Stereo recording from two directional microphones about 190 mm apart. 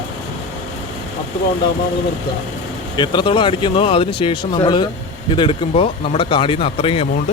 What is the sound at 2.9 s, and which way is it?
Speech, 25° left (ahead or behind).